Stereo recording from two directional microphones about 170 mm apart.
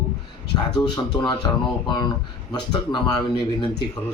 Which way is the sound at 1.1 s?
25° left (ahead or behind).